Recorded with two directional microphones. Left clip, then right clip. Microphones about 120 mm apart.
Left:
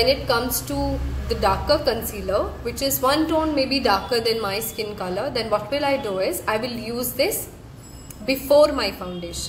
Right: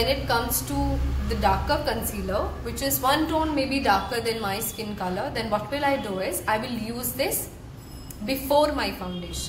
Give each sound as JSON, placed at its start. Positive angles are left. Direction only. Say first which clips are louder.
{"t": 0.0, "sound": "a woman's voice", "louder": "left 4 dB", "side_deg": 35}